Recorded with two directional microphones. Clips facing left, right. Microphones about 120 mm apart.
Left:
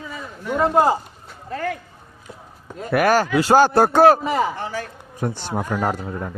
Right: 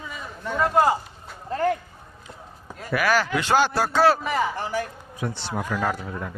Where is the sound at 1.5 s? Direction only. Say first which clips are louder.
Right 3 dB; 30° right (ahead or behind).